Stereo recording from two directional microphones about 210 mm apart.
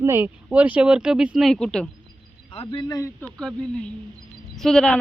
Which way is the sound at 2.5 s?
20° left (ahead or behind).